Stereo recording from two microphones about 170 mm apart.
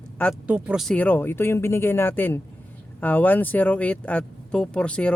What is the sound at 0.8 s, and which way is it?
Speech, 10° left (ahead or behind).